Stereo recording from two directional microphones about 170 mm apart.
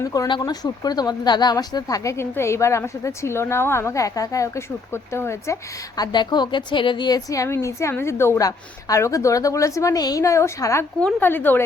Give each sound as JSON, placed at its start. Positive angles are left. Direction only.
{"t": 0.0, "sound": "speech", "side_deg": 20}